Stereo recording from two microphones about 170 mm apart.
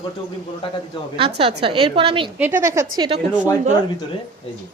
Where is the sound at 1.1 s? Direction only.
35° right (ahead or behind).